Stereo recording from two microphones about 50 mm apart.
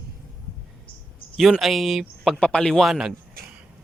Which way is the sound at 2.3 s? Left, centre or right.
Centre.